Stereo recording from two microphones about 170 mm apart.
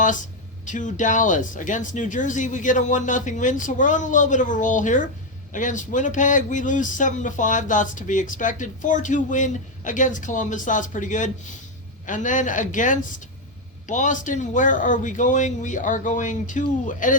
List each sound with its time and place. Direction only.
0.6 s speech: 50° left (ahead or behind)